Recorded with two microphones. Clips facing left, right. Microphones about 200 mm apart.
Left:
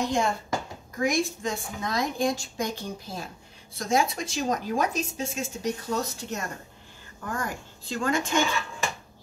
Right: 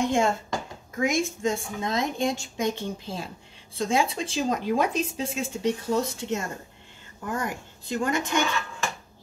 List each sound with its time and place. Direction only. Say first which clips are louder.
0.0 s speech: right 3 dB; 25° right (ahead or behind)